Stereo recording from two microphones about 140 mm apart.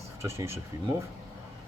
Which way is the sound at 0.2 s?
20° right (ahead or behind).